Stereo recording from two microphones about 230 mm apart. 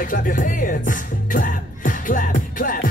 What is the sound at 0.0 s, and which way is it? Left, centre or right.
Music, left.